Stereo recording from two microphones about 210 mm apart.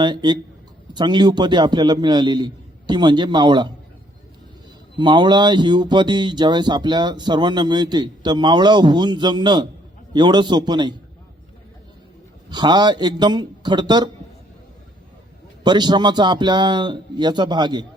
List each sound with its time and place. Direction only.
0.0 s speech: 20° right (ahead or behind)
4.9 s speech: 20° right (ahead or behind)
12.5 s speech: 20° right (ahead or behind)
15.6 s speech: 20° right (ahead or behind)